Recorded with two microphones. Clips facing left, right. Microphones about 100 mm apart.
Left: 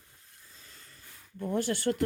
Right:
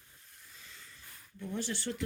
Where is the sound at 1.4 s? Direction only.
55° left (ahead or behind).